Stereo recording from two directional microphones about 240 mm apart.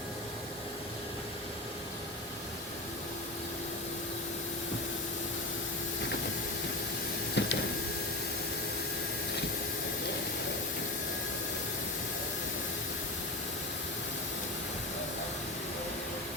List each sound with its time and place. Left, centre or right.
7.4 s printer: left